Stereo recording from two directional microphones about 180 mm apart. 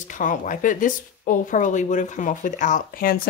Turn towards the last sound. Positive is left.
turn(degrees=55)  # may be behind; listen again after turning